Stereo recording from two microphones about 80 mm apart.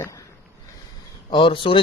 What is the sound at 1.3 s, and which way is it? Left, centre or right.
Speech, left.